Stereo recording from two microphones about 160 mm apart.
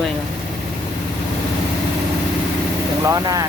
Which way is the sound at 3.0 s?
20° right (ahead or behind).